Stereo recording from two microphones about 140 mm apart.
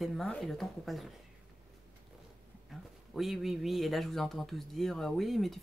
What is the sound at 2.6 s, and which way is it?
Speech, centre (ahead or behind).